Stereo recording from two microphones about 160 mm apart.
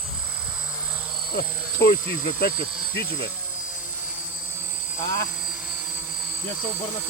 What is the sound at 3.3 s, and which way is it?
Helicopter, 10° right (ahead or behind).